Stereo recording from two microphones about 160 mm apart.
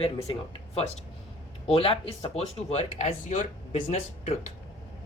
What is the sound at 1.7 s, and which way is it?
Speech, 35° left (ahead or behind).